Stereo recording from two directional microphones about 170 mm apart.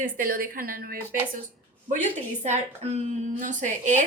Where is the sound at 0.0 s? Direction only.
55° right (ahead or behind).